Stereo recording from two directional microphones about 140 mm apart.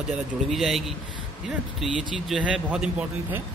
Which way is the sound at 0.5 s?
Centre (ahead or behind).